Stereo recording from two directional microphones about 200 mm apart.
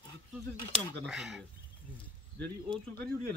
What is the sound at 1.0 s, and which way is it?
Speech, centre (ahead or behind).